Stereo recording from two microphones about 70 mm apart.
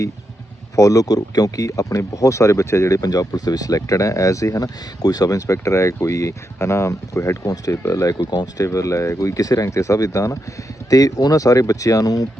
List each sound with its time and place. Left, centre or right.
0.8 s speech: left
3.0 s speech: left
5.5 s speech: left
7.4 s speech: left
7.8 s speech: left